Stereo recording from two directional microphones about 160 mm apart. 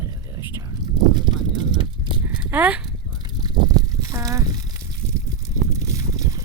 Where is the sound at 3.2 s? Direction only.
25° right (ahead or behind).